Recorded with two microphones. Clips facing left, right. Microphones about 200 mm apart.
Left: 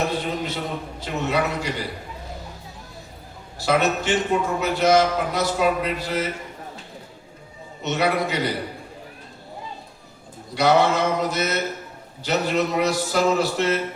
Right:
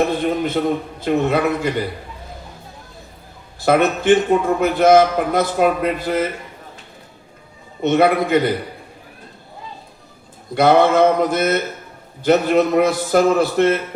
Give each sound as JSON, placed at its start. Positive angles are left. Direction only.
{"t": 0.1, "sound": "a man's voice", "side_deg": -55}
{"t": 3.6, "sound": "a man's voice", "side_deg": -55}
{"t": 7.8, "sound": "a man's voice", "side_deg": -55}
{"t": 10.5, "sound": "a man's voice", "side_deg": -55}